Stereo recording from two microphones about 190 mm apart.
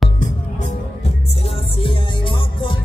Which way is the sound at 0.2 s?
40° left (ahead or behind).